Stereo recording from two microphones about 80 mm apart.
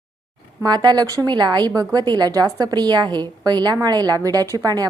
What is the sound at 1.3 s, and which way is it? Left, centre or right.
A woman's voice, right.